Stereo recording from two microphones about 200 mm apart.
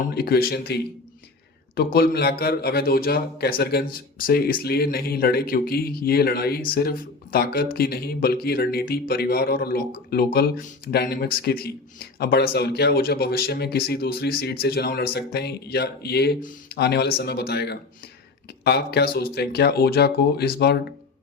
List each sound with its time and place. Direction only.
0.1 s speech: 50° left (ahead or behind)